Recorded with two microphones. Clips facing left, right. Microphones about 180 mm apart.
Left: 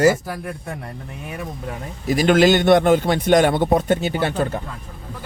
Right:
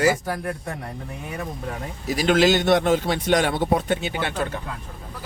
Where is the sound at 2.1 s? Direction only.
55° left (ahead or behind).